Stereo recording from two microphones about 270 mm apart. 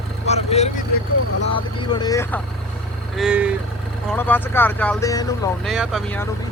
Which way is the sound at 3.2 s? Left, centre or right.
Centre.